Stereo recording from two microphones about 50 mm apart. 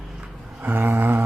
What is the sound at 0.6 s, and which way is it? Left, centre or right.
Speech, right.